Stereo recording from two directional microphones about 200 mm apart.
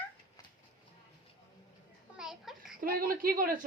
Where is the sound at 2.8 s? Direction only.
45° right (ahead or behind).